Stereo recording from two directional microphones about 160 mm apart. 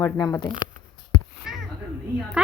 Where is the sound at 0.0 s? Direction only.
20° left (ahead or behind).